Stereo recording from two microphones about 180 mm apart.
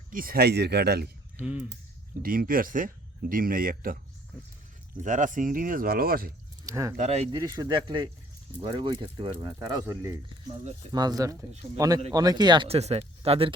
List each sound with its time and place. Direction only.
0.1 s speech: 50° right (ahead or behind)
1.4 s speech: 5° right (ahead or behind)
2.2 s speech: 55° right (ahead or behind)
5.0 s speech: 45° right (ahead or behind)
6.7 s speech: 15° right (ahead or behind)
6.9 s speech: 40° right (ahead or behind)
7.3 s speech: 20° right (ahead or behind)